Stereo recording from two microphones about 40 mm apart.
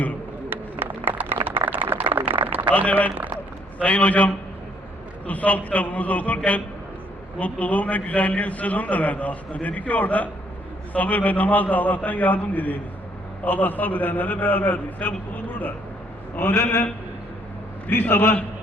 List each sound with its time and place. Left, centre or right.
0.5 s a sound: right
2.7 s a man's voice: left
17.8 s a man's voice: left